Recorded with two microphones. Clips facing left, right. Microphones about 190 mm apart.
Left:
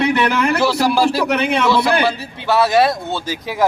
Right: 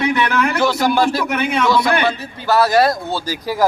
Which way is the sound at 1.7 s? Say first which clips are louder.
Even; 30° left (ahead or behind).